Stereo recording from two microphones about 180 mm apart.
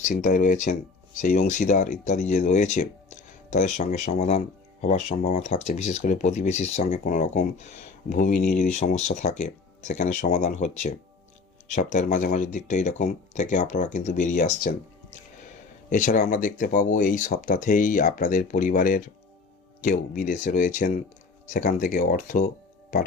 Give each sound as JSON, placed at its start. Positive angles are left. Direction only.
{"t": 0.0, "sound": "speech", "side_deg": 45}
{"t": 15.9, "sound": "speech", "side_deg": 45}